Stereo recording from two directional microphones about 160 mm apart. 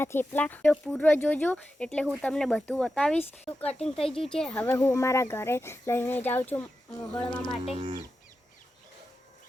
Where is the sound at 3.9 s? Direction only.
35° left (ahead or behind).